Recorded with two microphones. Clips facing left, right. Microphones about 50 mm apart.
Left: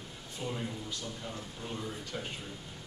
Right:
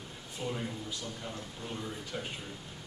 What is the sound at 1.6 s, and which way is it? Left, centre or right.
Speech, centre.